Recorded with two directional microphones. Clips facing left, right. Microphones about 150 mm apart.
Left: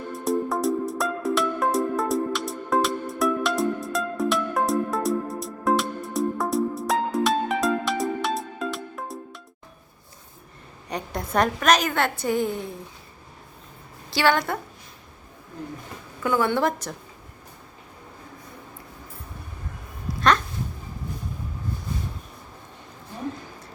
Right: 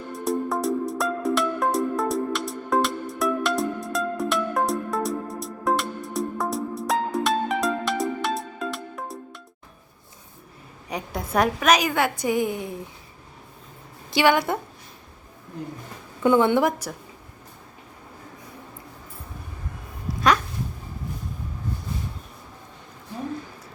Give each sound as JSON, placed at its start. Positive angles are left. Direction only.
{"t": 0.1, "sound": "music", "side_deg": 0}
{"t": 10.8, "sound": "a woman's voice", "side_deg": -5}
{"t": 14.1, "sound": "a woman's voice", "side_deg": -15}
{"t": 16.2, "sound": "a woman's voice", "side_deg": -20}
{"t": 20.1, "sound": "dog", "side_deg": -5}